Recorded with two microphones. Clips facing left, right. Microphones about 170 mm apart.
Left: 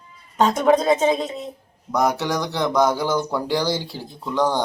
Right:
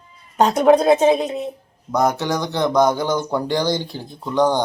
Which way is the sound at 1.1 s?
10° right (ahead or behind).